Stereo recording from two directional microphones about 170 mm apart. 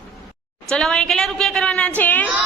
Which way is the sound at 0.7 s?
5° left (ahead or behind).